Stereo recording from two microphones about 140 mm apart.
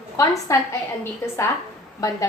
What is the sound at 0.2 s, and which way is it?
Speech, 25° left (ahead or behind).